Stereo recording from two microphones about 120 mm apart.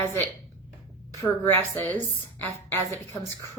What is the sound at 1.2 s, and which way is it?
A woman's voice, 20° left (ahead or behind).